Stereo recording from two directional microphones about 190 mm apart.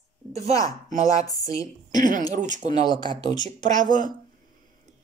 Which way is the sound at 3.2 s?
20° left (ahead or behind).